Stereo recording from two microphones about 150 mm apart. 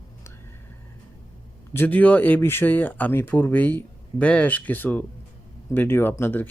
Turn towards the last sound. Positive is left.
turn(degrees=15)  # may be behind; listen again after turning